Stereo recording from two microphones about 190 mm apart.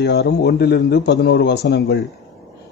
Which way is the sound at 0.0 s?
60° left (ahead or behind).